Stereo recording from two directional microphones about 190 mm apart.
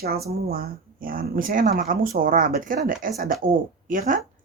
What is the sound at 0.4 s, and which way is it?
A woman's voice, 50° right (ahead or behind).